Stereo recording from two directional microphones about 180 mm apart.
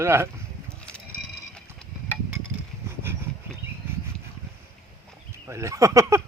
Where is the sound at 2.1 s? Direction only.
10° right (ahead or behind).